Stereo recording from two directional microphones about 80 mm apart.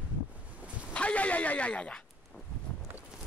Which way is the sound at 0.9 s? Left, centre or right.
Centre.